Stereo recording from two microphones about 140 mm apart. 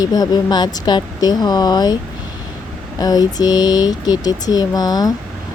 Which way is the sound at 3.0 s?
25° left (ahead or behind).